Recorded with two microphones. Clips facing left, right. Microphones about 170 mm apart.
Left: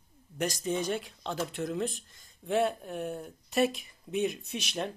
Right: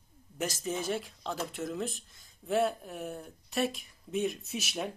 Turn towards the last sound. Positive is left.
turn(degrees=-5)  # may be behind; listen again after turning